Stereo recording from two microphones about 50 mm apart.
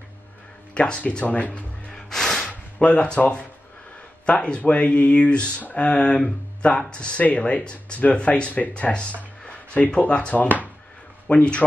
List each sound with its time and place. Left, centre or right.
0.7 s speech: centre
1.9 s music: centre
2.8 s speech: left
10.3 s speech: left
11.2 s speech: left